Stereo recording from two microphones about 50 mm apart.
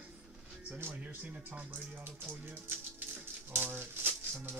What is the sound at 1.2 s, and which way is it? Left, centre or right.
Speech, right.